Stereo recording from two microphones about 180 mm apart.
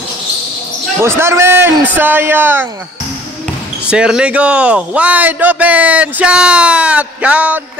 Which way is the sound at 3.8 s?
5° right (ahead or behind).